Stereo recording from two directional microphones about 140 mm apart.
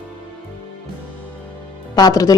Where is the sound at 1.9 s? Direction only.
25° left (ahead or behind).